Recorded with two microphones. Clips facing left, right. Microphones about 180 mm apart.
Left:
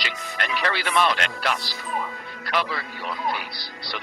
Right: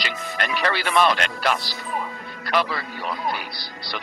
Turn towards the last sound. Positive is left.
turn(degrees=-40)  # may be behind; listen again after turning